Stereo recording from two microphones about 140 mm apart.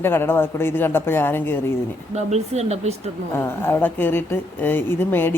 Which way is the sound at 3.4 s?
20° left (ahead or behind).